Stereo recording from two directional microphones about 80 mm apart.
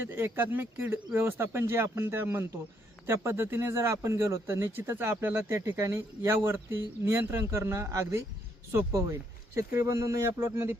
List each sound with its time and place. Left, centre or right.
0.1 s speech: right